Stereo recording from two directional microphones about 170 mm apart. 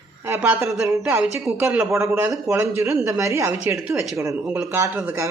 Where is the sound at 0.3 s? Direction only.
10° right (ahead or behind).